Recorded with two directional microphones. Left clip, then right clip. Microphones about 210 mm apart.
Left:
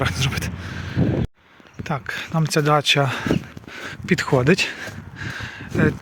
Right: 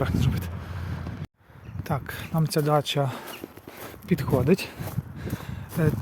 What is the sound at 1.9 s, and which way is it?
Speech, 5° left (ahead or behind).